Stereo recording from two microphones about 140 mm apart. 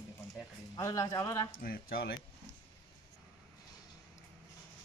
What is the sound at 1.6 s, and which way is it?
Speech, 90° left.